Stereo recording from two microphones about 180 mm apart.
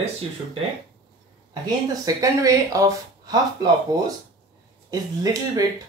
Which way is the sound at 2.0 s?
20° right (ahead or behind).